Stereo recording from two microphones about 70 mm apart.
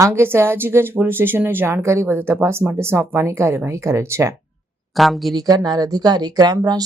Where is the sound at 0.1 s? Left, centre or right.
Right.